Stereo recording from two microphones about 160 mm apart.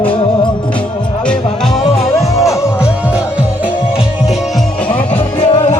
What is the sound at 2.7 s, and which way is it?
Music, 5° right (ahead or behind).